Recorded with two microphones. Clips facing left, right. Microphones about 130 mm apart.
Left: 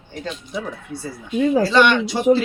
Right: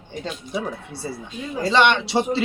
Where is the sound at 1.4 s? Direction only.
90° left.